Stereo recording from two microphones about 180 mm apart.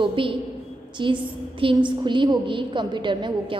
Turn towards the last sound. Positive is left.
turn(degrees=-25)  # may be behind; listen again after turning